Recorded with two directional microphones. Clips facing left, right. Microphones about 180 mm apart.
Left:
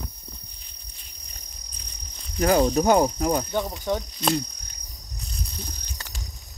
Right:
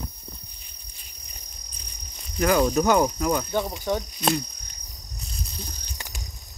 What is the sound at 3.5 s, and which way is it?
Speech, 10° right (ahead or behind).